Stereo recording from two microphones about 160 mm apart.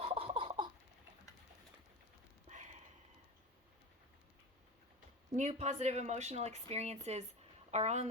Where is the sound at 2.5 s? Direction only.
45° right (ahead or behind).